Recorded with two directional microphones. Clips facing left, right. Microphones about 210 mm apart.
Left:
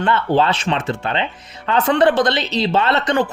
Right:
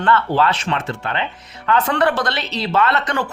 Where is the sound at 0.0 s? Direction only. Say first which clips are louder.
Left 1 dB; 20° left (ahead or behind).